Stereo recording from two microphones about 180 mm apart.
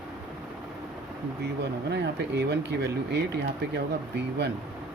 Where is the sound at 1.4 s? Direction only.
70° right (ahead or behind).